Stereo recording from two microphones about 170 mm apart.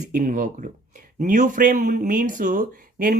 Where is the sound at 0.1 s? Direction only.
50° right (ahead or behind).